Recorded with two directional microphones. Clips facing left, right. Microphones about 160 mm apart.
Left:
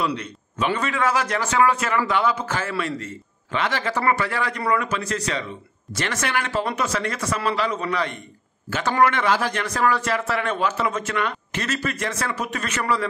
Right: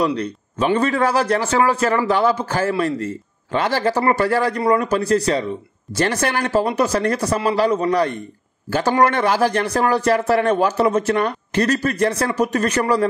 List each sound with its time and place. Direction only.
0.0 s a man's voice: 35° right (ahead or behind)